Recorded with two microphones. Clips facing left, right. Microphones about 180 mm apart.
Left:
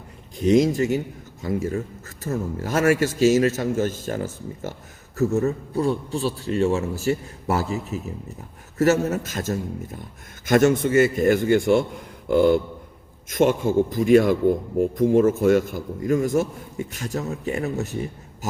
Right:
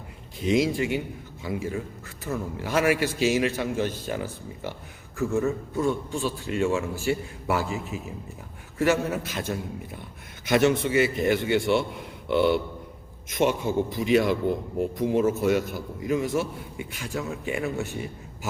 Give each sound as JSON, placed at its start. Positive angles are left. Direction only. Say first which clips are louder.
{"t": 0.3, "sound": "a man's voice", "louder": "left 5 dB", "side_deg": 45}